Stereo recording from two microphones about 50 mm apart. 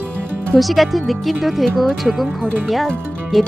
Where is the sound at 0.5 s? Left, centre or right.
Centre.